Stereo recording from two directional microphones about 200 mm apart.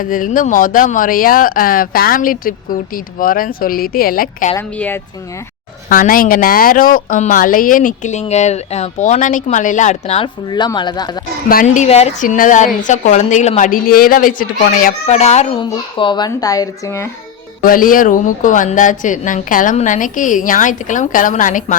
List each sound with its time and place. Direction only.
0.0 s speech: 45° left (ahead or behind)
4.5 s a child's voice: 10° left (ahead or behind)
5.9 s a woman's voice: 45° left (ahead or behind); by 11.2 s 20° left (ahead or behind)
11.4 s a woman's voice: 40° left (ahead or behind)
15.0 s a woman's voice: 35° left (ahead or behind)
15.7 s a child's voice: 25° left (ahead or behind)
17.6 s a woman's voice: 45° left (ahead or behind)